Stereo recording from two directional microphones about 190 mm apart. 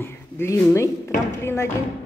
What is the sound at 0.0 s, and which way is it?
Speech, 15° left (ahead or behind).